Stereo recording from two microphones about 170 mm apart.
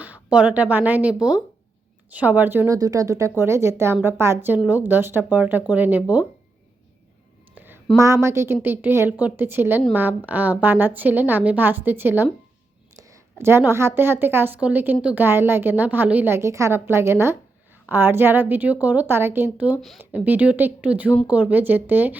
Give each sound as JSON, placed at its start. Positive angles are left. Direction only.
{"t": 0.0, "sound": "a woman's voice", "side_deg": -10}
{"t": 7.5, "sound": "a sound", "side_deg": -10}
{"t": 7.9, "sound": "a woman's voice", "side_deg": -15}